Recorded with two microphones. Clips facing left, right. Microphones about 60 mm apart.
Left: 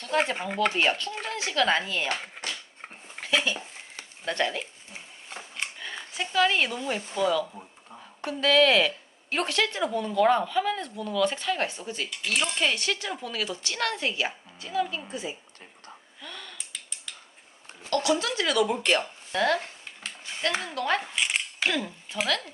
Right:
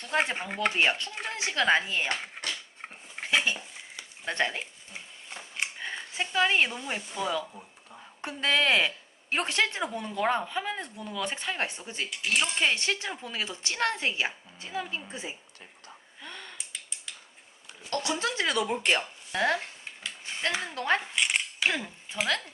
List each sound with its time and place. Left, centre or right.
0.3 s speech: centre
0.8 s speech: centre
3.2 s dishes: right
4.3 s speech: right
5.8 s speech: right
16.2 s a sound: right
17.9 s speech: right
20.7 s speech: right
21.2 s a sound: centre
21.6 s speech: right